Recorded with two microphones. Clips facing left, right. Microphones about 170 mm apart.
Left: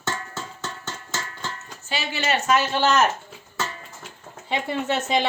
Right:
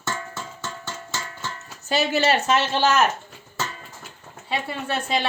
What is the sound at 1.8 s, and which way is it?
Speech, 40° right (ahead or behind).